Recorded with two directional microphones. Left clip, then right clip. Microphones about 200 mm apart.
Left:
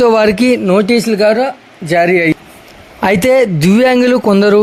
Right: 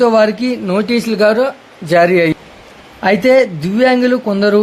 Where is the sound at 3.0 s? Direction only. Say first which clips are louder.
Even; 50° left (ahead or behind).